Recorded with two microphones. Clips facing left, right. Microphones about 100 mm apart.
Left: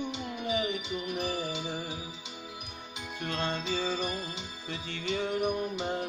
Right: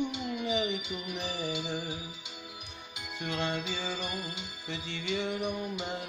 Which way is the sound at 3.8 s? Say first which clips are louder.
Left 3 dB; 25° left (ahead or behind).